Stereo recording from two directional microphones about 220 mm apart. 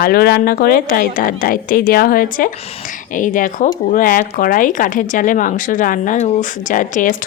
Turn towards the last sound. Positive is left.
turn(degrees=35)  # may be behind; listen again after turning